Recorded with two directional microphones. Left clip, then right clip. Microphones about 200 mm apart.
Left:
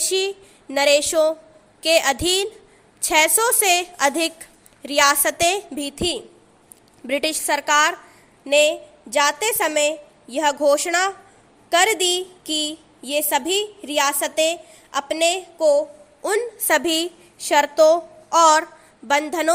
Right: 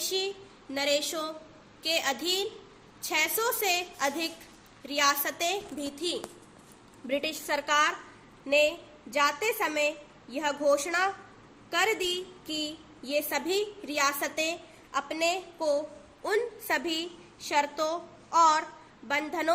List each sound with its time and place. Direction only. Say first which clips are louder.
0.0 s a woman's voice: left 9 dB; 50° left (ahead or behind)